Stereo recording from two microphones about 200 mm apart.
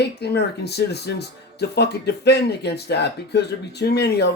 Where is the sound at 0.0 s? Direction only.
55° left (ahead or behind).